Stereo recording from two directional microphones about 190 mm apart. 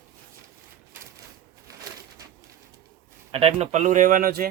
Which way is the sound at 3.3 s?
30° right (ahead or behind).